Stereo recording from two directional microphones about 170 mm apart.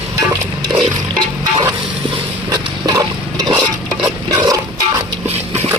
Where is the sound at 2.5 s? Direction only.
25° right (ahead or behind).